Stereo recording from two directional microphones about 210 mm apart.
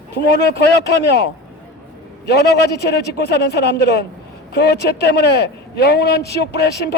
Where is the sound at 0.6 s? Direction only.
50° left (ahead or behind).